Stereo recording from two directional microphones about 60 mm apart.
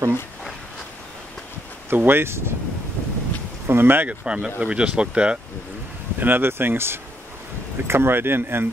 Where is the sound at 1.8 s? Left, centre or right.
Right.